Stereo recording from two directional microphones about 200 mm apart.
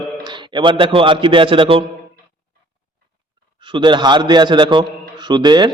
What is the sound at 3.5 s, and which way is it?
A man's voice, 25° right (ahead or behind).